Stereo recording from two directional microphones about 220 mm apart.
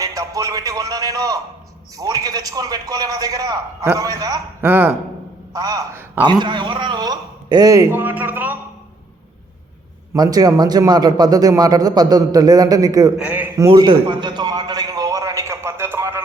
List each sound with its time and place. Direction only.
0.0 s a man's voice: 15° right (ahead or behind)
10.2 s a man's voice: 15° right (ahead or behind)
13.7 s a sound: 20° right (ahead or behind)